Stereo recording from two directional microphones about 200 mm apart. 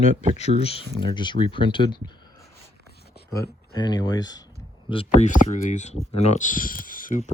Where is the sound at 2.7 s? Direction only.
55° left (ahead or behind).